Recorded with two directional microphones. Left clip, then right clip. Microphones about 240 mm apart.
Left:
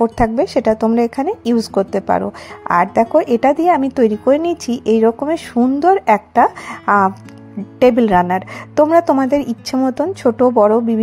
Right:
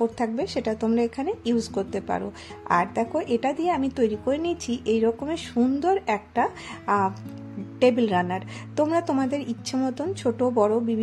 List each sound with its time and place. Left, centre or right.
0.0 s speech: left